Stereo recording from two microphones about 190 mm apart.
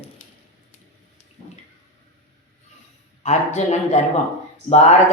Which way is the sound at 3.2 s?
35° left (ahead or behind).